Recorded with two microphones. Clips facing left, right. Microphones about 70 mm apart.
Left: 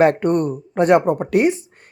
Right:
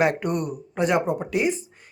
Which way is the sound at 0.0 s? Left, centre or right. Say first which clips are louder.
Left 7 dB; left.